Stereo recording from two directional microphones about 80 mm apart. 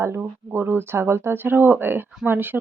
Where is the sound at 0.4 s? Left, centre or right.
Right.